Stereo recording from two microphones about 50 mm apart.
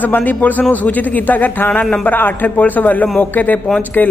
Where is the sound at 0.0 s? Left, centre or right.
Left.